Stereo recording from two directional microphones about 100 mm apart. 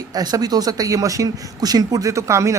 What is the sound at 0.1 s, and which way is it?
Speech, 40° right (ahead or behind).